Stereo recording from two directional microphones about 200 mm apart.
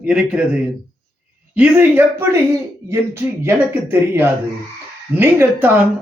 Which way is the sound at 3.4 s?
10° right (ahead or behind).